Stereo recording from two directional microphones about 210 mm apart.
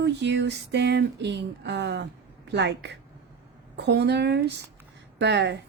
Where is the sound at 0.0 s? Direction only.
55° right (ahead or behind).